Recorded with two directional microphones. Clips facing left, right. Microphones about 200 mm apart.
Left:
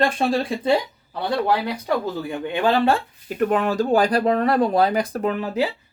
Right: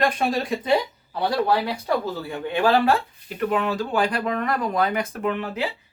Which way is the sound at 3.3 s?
45° left (ahead or behind).